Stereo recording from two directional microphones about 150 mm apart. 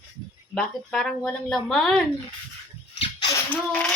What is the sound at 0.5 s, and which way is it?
A woman's voice, 5° left (ahead or behind).